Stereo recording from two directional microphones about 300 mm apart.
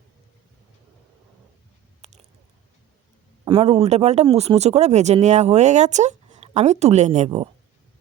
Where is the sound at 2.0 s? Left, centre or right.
Right.